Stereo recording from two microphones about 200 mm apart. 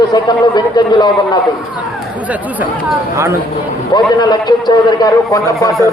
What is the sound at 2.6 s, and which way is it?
Speech, 10° right (ahead or behind).